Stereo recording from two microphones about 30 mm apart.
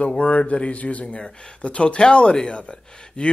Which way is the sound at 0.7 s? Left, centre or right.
Left.